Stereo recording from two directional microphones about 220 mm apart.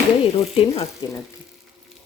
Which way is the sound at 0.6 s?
25° left (ahead or behind).